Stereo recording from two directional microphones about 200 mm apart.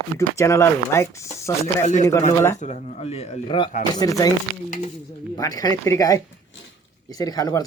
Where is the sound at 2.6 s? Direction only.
40° left (ahead or behind); by 4.3 s 15° left (ahead or behind).